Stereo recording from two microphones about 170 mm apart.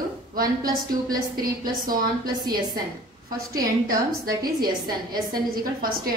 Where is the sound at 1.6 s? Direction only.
55° right (ahead or behind).